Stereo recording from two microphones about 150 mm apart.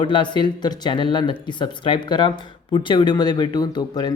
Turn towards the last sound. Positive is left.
turn(degrees=25)  # may be behind; listen again after turning